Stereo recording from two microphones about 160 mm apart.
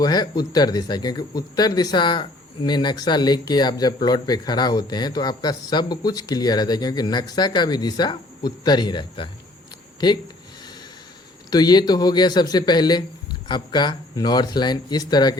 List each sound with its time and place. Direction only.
0.0 s speech: 25° left (ahead or behind)
11.5 s speech: 25° left (ahead or behind)